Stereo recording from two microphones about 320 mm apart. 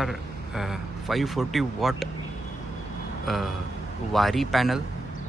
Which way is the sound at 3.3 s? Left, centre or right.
Centre.